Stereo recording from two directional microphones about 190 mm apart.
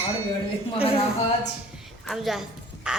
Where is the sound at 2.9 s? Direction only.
5° right (ahead or behind).